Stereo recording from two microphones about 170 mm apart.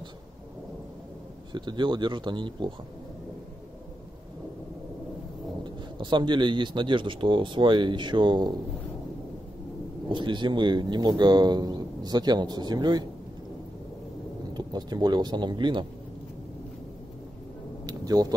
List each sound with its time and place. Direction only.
1.5 s speech: 25° right (ahead or behind)
5.6 s speech: 25° right (ahead or behind)
10.0 s speech: 30° right (ahead or behind)
14.5 s speech: 25° right (ahead or behind)
17.8 s a sound: 20° right (ahead or behind)